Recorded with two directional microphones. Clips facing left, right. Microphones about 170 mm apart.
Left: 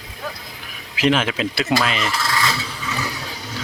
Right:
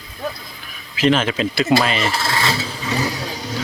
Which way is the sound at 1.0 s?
10° left (ahead or behind).